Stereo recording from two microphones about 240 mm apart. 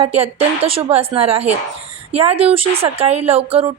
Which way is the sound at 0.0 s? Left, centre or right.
Right.